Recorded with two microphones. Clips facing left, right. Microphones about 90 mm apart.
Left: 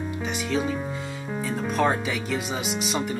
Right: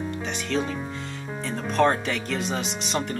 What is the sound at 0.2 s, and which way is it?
Music, 5° left (ahead or behind).